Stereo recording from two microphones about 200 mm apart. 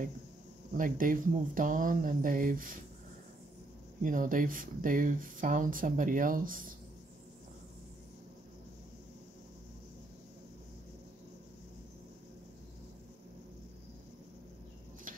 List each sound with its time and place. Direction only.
0.7 s speech: 45° right (ahead or behind)
4.0 s speech: 40° right (ahead or behind)